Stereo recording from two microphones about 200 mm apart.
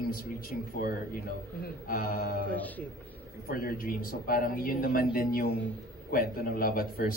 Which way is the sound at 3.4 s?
50° left (ahead or behind).